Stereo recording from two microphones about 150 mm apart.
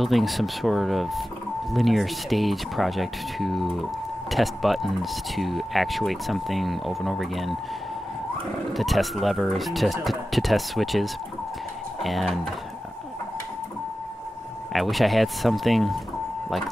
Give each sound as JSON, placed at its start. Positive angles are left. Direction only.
{"t": 0.0, "sound": "speech", "side_deg": 0}
{"t": 8.7, "sound": "speech", "side_deg": 0}
{"t": 14.7, "sound": "speech", "side_deg": 0}